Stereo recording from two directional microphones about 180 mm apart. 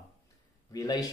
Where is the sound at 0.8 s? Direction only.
20° left (ahead or behind).